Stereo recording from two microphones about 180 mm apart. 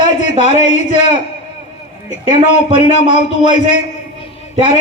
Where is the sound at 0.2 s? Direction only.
40° left (ahead or behind).